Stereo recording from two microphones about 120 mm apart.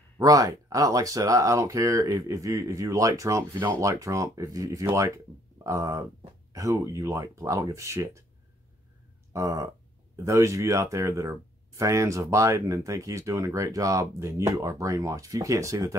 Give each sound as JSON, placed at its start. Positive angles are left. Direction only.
{"t": 0.2, "sound": "speech", "side_deg": -30}
{"t": 9.3, "sound": "speech", "side_deg": -25}